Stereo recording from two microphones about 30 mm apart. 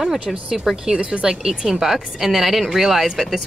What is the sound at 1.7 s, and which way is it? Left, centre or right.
Speech, centre.